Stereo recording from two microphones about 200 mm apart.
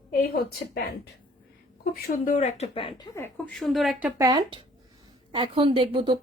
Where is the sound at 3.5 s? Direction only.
Centre (ahead or behind).